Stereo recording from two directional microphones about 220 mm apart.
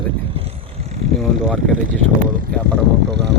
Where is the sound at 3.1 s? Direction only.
50° right (ahead or behind).